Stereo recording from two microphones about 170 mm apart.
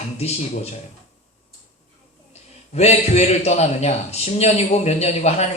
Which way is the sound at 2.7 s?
40° left (ahead or behind).